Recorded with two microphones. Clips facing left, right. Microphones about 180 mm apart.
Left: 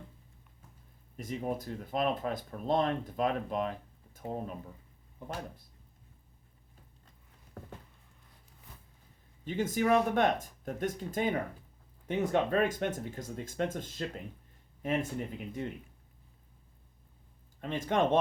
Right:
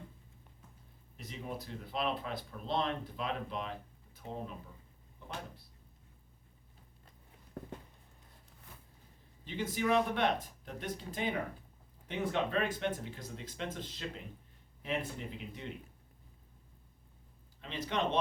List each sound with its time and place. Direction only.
1.1 s speech: 45° left (ahead or behind)
9.4 s speech: 45° left (ahead or behind)
17.6 s speech: 50° left (ahead or behind)